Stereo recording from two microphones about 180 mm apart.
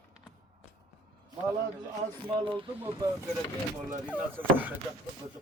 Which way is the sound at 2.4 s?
25° right (ahead or behind).